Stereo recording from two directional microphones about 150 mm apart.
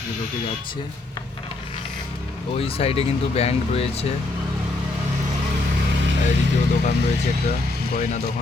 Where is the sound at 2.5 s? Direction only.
40° left (ahead or behind).